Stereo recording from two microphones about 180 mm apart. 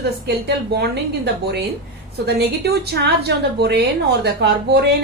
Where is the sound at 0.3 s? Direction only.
65° right (ahead or behind).